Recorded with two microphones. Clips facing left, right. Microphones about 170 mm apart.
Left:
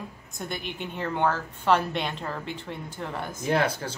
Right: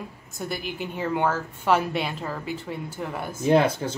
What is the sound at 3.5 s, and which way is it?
Speech, 20° right (ahead or behind).